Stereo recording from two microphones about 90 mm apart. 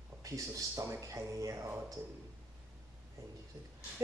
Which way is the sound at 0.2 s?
40° right (ahead or behind).